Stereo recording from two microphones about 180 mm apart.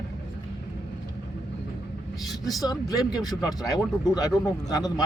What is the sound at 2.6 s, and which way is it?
Speech, 20° left (ahead or behind).